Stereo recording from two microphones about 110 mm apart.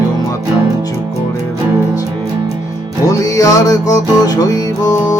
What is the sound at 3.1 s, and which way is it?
Music, 30° left (ahead or behind).